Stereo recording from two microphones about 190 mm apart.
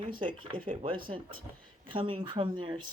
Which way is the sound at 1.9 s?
25° right (ahead or behind).